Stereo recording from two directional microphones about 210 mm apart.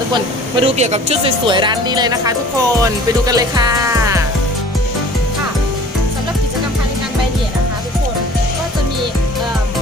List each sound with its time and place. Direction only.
0.6 s speech: 30° right (ahead or behind)
2.8 s music: 15° right (ahead or behind)